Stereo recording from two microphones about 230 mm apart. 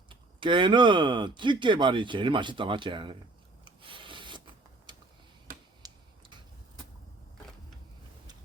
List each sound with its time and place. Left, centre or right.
0.1 s speech: right
3.6 s rub: right
5.5 s finger snapping: right
5.8 s tick-tock: centre